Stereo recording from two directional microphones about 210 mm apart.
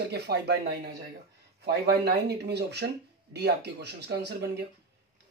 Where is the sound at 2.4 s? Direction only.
50° right (ahead or behind).